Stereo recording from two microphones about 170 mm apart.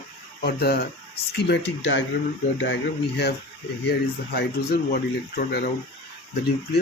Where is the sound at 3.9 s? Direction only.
70° left (ahead or behind).